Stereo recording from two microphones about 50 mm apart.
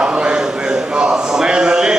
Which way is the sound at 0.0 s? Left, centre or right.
Centre.